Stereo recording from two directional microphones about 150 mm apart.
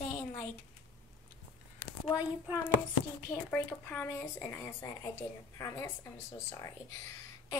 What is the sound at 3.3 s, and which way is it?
Speech, 15° left (ahead or behind).